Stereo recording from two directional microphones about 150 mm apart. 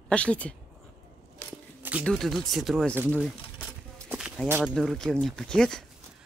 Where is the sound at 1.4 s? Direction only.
15° left (ahead or behind).